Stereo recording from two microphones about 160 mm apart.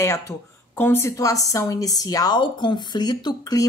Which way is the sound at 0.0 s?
20° left (ahead or behind).